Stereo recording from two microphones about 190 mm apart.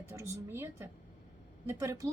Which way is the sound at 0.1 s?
15° right (ahead or behind).